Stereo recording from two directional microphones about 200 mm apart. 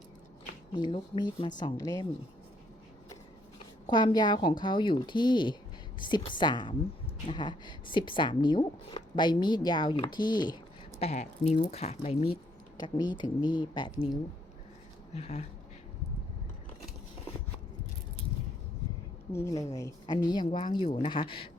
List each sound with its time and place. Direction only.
0.7 s speech: 25° left (ahead or behind)
3.8 s speech: 25° left (ahead or behind)
11.0 s speech: 35° left (ahead or behind)
19.3 s speech: 15° left (ahead or behind)